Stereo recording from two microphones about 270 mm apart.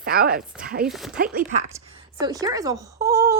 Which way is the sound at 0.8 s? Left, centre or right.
Centre.